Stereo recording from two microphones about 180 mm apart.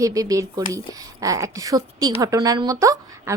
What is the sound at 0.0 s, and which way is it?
A woman's voice, 20° right (ahead or behind).